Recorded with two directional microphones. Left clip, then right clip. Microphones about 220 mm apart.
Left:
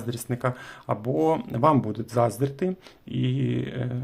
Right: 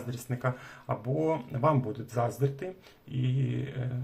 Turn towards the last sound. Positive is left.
turn(degrees=45)  # may be behind; listen again after turning